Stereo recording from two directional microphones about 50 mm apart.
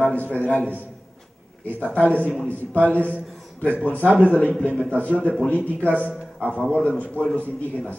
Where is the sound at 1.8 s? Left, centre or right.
Left.